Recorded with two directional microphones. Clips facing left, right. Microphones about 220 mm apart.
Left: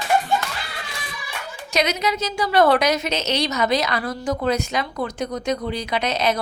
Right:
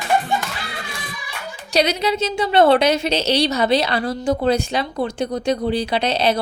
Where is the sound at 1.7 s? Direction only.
30° right (ahead or behind).